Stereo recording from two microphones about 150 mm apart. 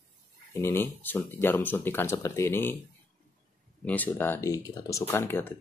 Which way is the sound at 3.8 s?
10° left (ahead or behind).